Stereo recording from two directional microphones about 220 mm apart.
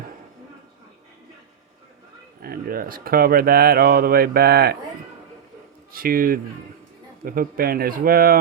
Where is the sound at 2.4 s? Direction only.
40° right (ahead or behind).